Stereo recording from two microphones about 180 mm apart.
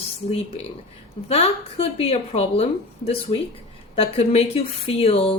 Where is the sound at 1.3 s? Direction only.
35° left (ahead or behind).